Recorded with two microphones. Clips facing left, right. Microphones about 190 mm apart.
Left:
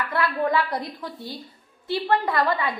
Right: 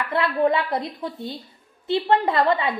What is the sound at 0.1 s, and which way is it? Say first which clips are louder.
A woman's voice: right 4 dB; 20° right (ahead or behind).